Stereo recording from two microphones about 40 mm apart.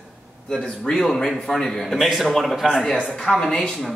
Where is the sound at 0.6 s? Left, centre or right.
Centre.